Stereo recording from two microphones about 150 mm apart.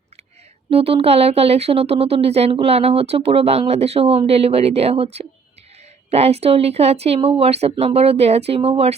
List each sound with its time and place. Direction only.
0.7 s speech: 40° right (ahead or behind)